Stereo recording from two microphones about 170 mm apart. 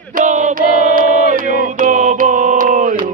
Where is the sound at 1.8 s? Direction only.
45° right (ahead or behind).